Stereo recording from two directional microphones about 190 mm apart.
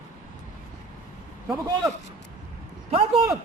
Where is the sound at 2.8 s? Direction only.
30° right (ahead or behind).